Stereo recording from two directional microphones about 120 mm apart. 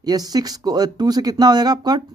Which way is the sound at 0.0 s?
35° right (ahead or behind).